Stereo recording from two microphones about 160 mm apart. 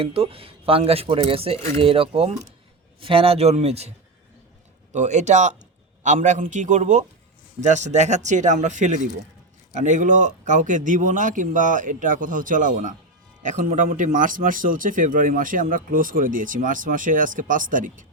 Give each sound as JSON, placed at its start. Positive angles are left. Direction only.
{"t": 0.0, "sound": "speech", "side_deg": -35}
{"t": 4.9, "sound": "speech", "side_deg": -45}